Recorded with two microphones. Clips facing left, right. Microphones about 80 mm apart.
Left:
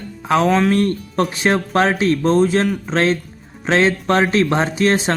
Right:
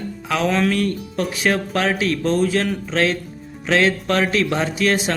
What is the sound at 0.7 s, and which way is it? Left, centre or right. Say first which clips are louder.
Speech: left 4 dB; left.